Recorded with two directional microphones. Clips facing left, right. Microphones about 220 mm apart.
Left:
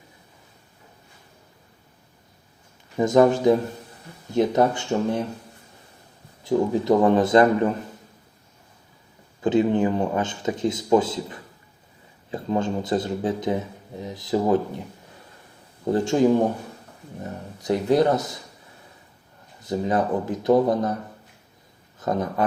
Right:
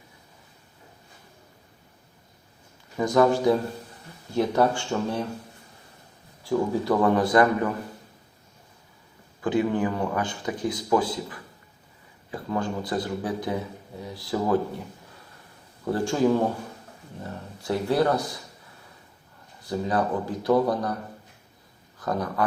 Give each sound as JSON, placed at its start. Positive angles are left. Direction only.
{"t": 3.0, "sound": "speech", "side_deg": 20}
{"t": 6.4, "sound": "speech", "side_deg": 20}
{"t": 9.4, "sound": "speech", "side_deg": 20}
{"t": 15.8, "sound": "speech", "side_deg": 20}
{"t": 19.6, "sound": "speech", "side_deg": 20}
{"t": 22.0, "sound": "speech", "side_deg": 20}